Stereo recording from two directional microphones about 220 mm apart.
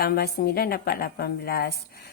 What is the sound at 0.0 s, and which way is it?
A woman's voice, 45° left (ahead or behind).